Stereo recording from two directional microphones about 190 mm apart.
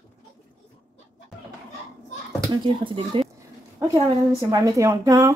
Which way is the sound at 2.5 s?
25° right (ahead or behind).